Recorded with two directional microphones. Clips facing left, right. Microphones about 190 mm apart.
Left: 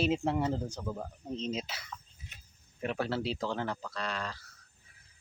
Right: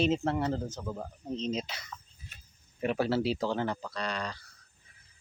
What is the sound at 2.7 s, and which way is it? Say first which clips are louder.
Speech: right 5 dB; 5° right (ahead or behind).